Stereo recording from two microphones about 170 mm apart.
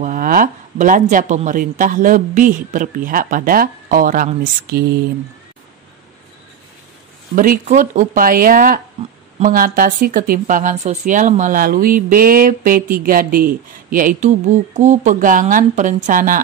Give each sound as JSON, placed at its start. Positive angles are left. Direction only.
{"t": 0.0, "sound": "speech", "side_deg": -55}
{"t": 7.3, "sound": "speech", "side_deg": -55}